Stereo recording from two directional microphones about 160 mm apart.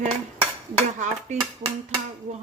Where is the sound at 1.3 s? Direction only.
45° right (ahead or behind).